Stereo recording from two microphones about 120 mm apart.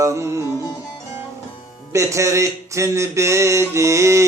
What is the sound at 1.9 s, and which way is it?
Music, 25° right (ahead or behind).